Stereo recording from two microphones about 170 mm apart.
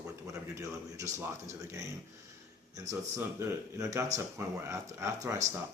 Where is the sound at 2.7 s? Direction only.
20° right (ahead or behind).